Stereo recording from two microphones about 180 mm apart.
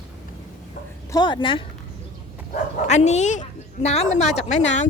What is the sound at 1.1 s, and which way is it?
Speech, 25° left (ahead or behind).